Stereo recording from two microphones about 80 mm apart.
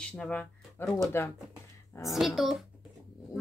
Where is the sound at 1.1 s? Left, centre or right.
Left.